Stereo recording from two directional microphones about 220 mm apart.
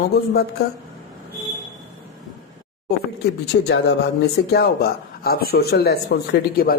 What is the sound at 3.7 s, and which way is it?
Speech, 50° left (ahead or behind).